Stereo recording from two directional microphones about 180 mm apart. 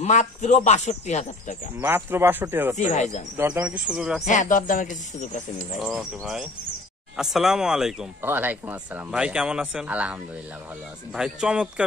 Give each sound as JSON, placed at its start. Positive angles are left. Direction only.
{"t": 0.0, "sound": "speech", "side_deg": 40}
{"t": 1.8, "sound": "speech", "side_deg": -10}
{"t": 2.9, "sound": "speech", "side_deg": 40}
{"t": 3.3, "sound": "speech", "side_deg": -10}
{"t": 4.2, "sound": "speech", "side_deg": 45}
{"t": 5.8, "sound": "speech", "side_deg": -5}
{"t": 11.1, "sound": "speech", "side_deg": -5}